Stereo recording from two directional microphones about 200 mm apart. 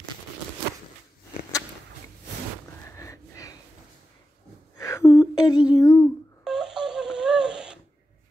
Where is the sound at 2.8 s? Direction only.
15° left (ahead or behind).